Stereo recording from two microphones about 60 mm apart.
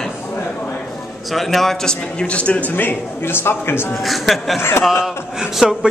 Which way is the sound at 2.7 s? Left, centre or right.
Left.